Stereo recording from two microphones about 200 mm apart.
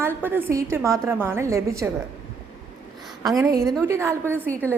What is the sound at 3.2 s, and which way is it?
A woman's voice, 15° right (ahead or behind).